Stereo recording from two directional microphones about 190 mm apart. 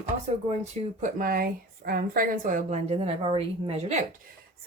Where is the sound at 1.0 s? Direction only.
45° right (ahead or behind).